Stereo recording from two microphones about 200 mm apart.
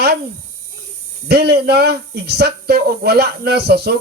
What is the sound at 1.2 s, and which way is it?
A man's voice, 55° right (ahead or behind).